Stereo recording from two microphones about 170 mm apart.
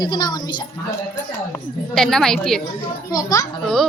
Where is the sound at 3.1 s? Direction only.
20° left (ahead or behind).